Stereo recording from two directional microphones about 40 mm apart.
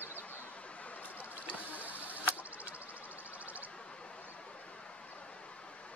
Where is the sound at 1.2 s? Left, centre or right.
Left.